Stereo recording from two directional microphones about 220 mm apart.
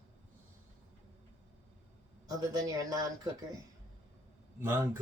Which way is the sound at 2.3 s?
15° right (ahead or behind).